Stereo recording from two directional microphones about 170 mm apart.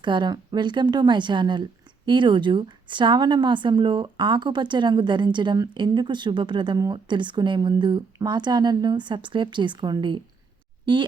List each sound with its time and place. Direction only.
0.0 s a woman's voice: 25° right (ahead or behind)